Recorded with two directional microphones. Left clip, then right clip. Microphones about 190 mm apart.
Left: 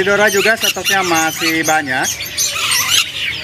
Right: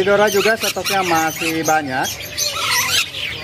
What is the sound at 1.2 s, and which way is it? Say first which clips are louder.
Bird: left 4 dB; 5° left (ahead or behind).